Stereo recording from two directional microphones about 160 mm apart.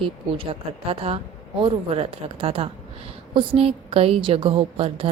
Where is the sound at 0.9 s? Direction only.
40° right (ahead or behind).